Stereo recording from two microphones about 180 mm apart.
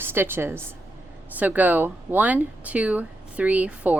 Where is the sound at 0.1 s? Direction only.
10° right (ahead or behind).